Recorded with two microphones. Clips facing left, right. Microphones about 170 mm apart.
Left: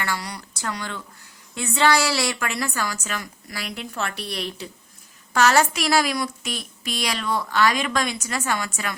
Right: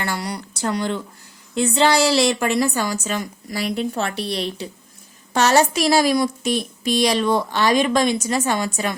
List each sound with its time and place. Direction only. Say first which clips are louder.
0.0 s a woman's voice: right 4 dB; 30° right (ahead or behind)